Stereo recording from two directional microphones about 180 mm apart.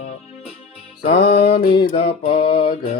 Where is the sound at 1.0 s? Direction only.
35° left (ahead or behind).